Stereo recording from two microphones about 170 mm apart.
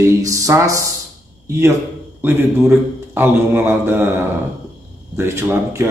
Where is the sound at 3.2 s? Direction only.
15° right (ahead or behind).